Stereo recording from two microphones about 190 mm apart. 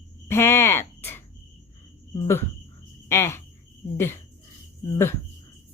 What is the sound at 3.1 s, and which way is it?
Cricket, 15° left (ahead or behind).